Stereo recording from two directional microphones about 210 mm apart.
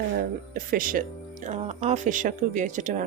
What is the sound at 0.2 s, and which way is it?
Speech, 40° right (ahead or behind).